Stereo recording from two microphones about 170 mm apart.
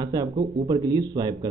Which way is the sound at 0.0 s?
20° right (ahead or behind).